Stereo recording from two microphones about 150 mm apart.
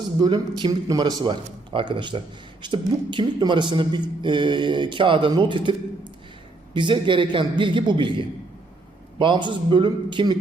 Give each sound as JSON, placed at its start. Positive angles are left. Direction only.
{"t": 0.2, "sound": "a man's voice", "side_deg": -30}
{"t": 6.7, "sound": "a man's voice", "side_deg": -30}
{"t": 9.1, "sound": "a man's voice", "side_deg": -30}